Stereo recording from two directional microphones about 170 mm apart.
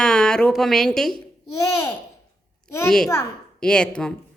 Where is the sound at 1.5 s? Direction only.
20° left (ahead or behind).